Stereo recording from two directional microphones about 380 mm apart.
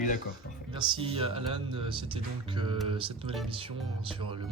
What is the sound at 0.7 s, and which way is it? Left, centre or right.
Speech, centre.